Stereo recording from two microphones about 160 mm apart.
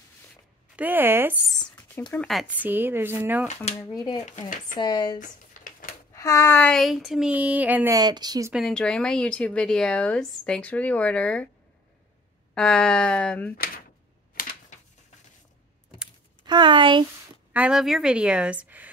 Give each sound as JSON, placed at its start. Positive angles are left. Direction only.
{"t": 0.7, "sound": "speech", "side_deg": -10}
{"t": 2.0, "sound": "speech", "side_deg": 5}
{"t": 3.9, "sound": "speech", "side_deg": 25}
{"t": 4.3, "sound": "speech", "side_deg": 55}
{"t": 4.7, "sound": "speech", "side_deg": 25}
{"t": 5.2, "sound": "a sound", "side_deg": 55}
{"t": 6.1, "sound": "speech", "side_deg": 20}
{"t": 7.9, "sound": "speech", "side_deg": -25}
{"t": 8.5, "sound": "speech", "side_deg": 5}
{"t": 12.5, "sound": "speech", "side_deg": 5}
{"t": 16.4, "sound": "speech", "side_deg": -30}
{"t": 17.5, "sound": "speech", "side_deg": -5}